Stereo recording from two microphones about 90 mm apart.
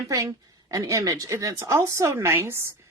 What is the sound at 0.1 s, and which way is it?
A woman's voice, 40° right (ahead or behind).